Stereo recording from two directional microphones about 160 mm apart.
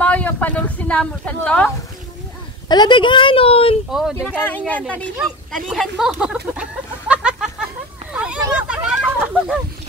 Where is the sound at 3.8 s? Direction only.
5° right (ahead or behind).